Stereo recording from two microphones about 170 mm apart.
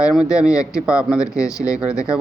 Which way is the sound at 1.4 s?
20° left (ahead or behind).